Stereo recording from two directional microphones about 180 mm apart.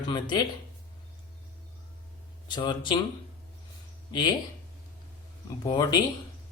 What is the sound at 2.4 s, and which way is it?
Speech, 25° left (ahead or behind).